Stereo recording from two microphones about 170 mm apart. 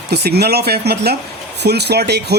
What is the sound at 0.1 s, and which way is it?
Speech, 70° right (ahead or behind).